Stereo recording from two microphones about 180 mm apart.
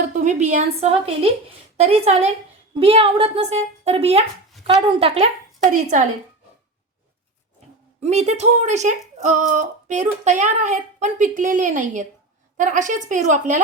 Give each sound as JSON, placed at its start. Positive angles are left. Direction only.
{"t": 0.1, "sound": "a woman's voice", "side_deg": -40}
{"t": 8.0, "sound": "a woman's voice", "side_deg": -40}